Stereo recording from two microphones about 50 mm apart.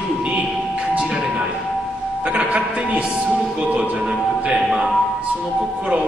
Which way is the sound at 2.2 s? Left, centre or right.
Right.